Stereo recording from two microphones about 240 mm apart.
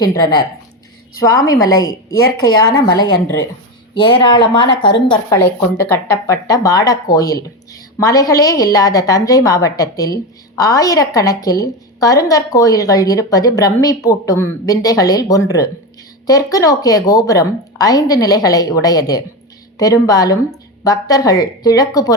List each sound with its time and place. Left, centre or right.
0.0 s speech: centre
1.6 s speech: centre
1.9 s speech: left
2.8 s speech: centre